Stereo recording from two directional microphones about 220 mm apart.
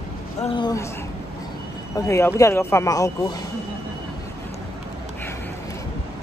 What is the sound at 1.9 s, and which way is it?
Speech, 10° left (ahead or behind).